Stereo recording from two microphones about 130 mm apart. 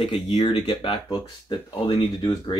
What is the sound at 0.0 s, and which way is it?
Speech, 40° left (ahead or behind).